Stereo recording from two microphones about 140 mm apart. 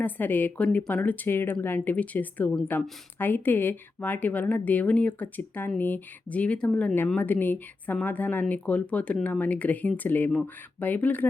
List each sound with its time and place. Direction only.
0.0 s speech: 15° left (ahead or behind)